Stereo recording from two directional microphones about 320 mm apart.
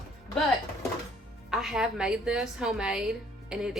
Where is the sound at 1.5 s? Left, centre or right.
Centre.